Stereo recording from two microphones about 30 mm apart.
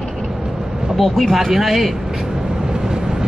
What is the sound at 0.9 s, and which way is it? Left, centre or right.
Speech, centre.